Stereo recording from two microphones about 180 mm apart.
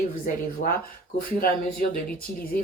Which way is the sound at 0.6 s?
45° left (ahead or behind).